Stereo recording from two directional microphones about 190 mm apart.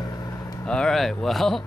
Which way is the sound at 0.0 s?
20° left (ahead or behind).